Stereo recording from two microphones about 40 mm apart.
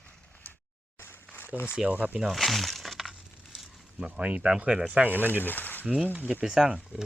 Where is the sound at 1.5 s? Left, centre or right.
Right.